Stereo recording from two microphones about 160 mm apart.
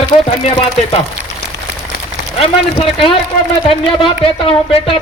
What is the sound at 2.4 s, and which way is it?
Speech, 35° left (ahead or behind).